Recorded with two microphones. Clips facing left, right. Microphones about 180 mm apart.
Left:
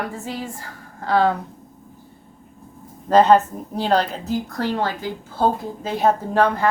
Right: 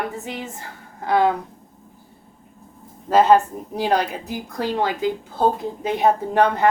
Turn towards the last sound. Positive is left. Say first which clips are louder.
# even
turn(degrees=-20)  # may be behind; listen again after turning